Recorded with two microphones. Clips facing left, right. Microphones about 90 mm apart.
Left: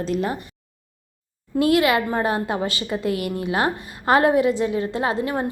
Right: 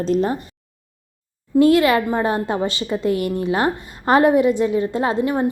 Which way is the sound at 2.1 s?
25° right (ahead or behind).